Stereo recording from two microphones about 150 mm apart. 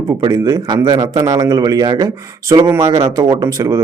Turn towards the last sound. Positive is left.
turn(degrees=-20)  # may be behind; listen again after turning